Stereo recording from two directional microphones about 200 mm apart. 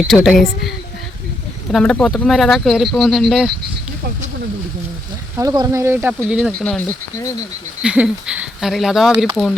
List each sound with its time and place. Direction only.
0.0 s speech: centre (ahead or behind)
1.7 s speech: 5° left (ahead or behind)
5.4 s speech: 15° right (ahead or behind); by 9.6 s centre (ahead or behind)